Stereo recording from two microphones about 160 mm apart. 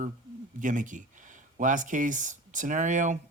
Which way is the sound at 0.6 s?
55° right (ahead or behind).